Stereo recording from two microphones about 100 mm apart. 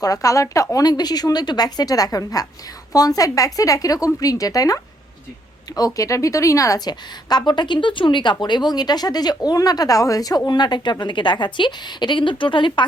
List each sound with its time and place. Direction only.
0.0 s a woman's voice: 35° left (ahead or behind); by 12.8 s 55° left (ahead or behind)